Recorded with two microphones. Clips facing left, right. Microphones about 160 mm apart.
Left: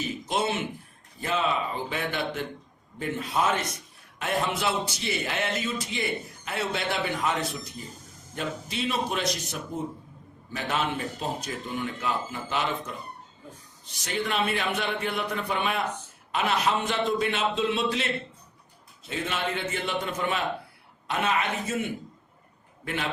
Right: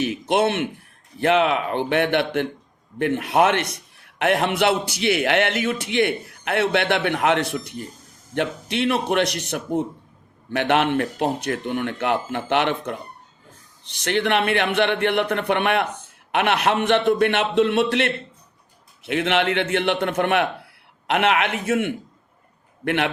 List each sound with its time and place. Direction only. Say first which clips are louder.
0.0 s a man's voice: right 8 dB; 70° right (ahead or behind)